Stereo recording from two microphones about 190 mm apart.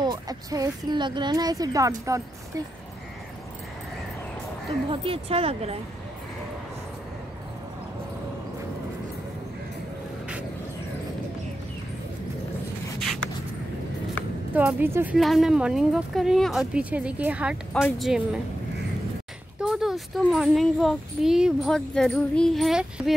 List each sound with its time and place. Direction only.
0.0 s a woman's voice: 20° right (ahead or behind)
5.0 s speech: 30° right (ahead or behind)
14.5 s speech: 5° right (ahead or behind)
15.1 s a child's voice: centre (ahead or behind)
19.6 s a child's voice: centre (ahead or behind)